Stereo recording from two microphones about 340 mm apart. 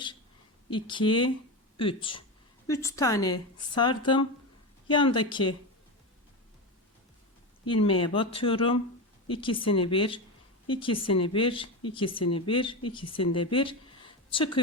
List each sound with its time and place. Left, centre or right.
0.7 s speech: centre
7.6 s speech: centre
13.5 s a sound: centre